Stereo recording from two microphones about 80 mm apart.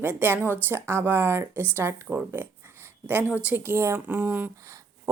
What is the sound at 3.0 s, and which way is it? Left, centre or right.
Speech, centre.